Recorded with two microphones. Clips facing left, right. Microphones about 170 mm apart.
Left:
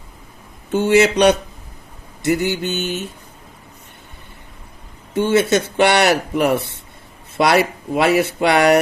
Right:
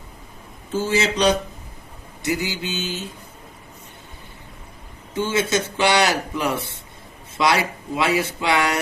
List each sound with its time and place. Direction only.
0.7 s speech: 70° left (ahead or behind)
5.1 s speech: 65° left (ahead or behind)